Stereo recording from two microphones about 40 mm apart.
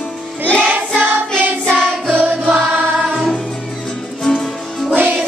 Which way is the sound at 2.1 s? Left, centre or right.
Right.